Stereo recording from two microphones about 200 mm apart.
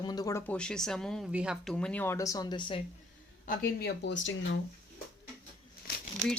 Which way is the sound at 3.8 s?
65° left (ahead or behind).